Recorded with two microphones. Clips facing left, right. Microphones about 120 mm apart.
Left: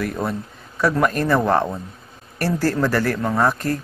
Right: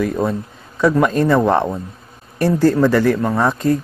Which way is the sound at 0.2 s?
20° right (ahead or behind).